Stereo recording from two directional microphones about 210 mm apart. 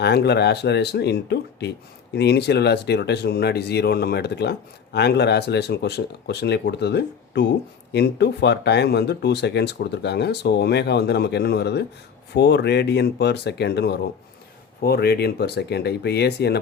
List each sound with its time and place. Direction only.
0.0 s speech: 50° left (ahead or behind)